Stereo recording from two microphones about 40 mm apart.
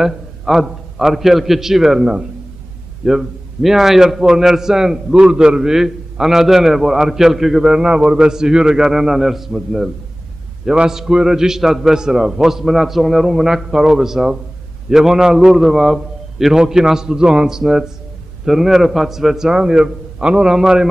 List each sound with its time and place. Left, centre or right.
0.0 s a man's voice: centre
10.6 s a man's voice: right; by 16.5 s centre
16.5 s a man's voice: centre